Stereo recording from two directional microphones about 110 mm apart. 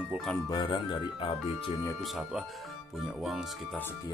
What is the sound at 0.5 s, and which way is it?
Speech, 40° left (ahead or behind).